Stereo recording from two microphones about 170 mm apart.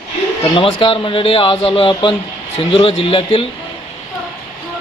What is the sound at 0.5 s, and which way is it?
Speech, 30° left (ahead or behind).